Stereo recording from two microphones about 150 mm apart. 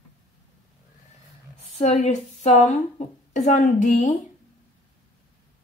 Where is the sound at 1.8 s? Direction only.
45° left (ahead or behind).